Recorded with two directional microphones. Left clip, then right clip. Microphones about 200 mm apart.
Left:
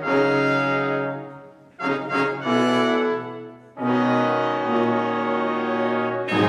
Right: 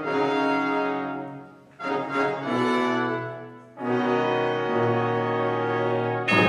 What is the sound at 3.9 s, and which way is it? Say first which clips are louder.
Music: left 3 dB; 20° left (ahead or behind).